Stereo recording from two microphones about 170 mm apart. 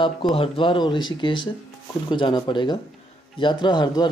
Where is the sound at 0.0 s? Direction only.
30° left (ahead or behind).